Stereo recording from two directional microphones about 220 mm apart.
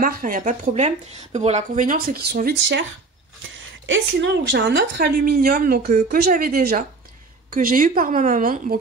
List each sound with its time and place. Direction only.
0.0 s speech: 40° right (ahead or behind)
3.8 s a woman's voice: 55° right (ahead or behind); by 8.7 s 40° right (ahead or behind)